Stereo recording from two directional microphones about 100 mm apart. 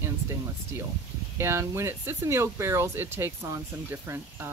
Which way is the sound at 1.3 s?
25° right (ahead or behind).